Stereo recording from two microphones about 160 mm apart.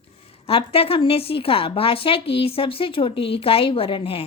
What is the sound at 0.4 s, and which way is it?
Speech, 35° left (ahead or behind).